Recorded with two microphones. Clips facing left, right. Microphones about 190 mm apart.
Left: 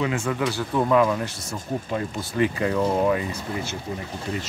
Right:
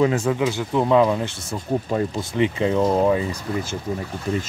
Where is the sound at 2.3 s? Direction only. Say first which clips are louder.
Right 2 dB; 20° right (ahead or behind).